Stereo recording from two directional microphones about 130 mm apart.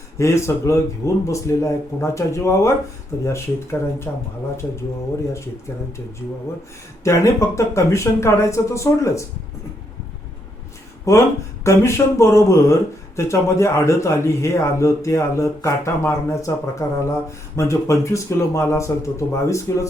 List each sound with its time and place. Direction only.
0.2 s speech: 20° left (ahead or behind)
7.0 s speech: 25° left (ahead or behind)
11.0 s speech: 25° left (ahead or behind)